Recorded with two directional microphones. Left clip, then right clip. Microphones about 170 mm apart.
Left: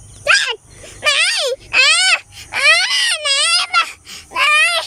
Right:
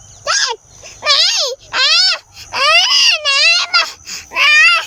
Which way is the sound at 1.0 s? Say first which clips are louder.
Right 2 dB; 10° left (ahead or behind).